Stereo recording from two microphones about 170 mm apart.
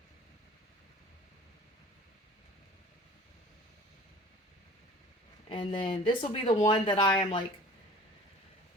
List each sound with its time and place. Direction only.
5.5 s speech: 30° left (ahead or behind)